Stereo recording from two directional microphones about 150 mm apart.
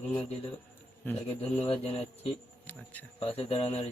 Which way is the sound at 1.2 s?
40° left (ahead or behind).